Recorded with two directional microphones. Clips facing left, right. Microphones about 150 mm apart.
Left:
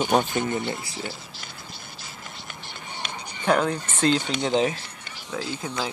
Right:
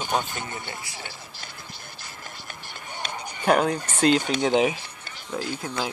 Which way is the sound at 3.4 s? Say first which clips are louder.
Right 1 dB; 15° right (ahead or behind).